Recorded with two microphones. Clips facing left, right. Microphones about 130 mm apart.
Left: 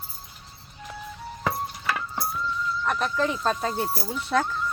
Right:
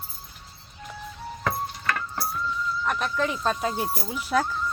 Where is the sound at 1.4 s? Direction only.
10° left (ahead or behind).